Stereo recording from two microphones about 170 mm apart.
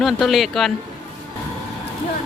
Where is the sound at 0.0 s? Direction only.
Centre (ahead or behind).